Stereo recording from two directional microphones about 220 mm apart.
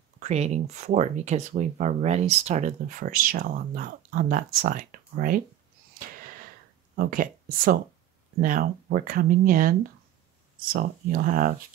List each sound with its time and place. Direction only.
0.2 s speech: 30° right (ahead or behind)
6.0 s a sound: 40° right (ahead or behind)
7.0 s speech: 40° right (ahead or behind)